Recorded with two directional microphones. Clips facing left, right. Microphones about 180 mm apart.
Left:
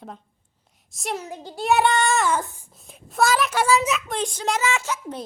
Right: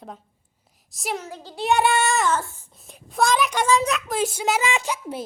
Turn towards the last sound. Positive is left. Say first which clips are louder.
# right 1 dB
turn(degrees=-10)  # may be behind; listen again after turning